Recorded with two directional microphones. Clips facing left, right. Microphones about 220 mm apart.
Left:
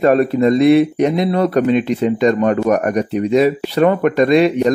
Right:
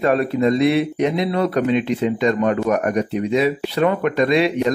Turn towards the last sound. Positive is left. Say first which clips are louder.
# left 5 dB
turn(degrees=45)  # may be behind; listen again after turning